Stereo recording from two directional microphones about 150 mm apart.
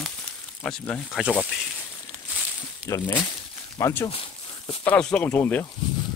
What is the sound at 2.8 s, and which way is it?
Speech, 20° left (ahead or behind).